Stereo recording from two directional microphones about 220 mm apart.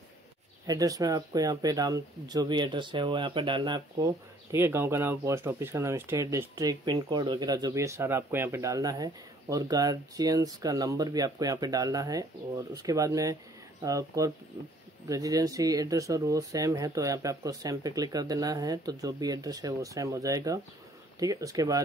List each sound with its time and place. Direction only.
0.7 s speech: 15° right (ahead or behind)